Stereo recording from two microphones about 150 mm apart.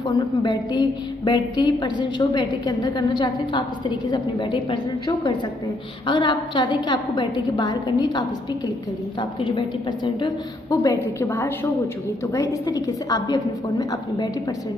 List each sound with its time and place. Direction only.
0.4 s a woman's voice: 30° left (ahead or behind)
9.4 s a woman's voice: 35° left (ahead or behind)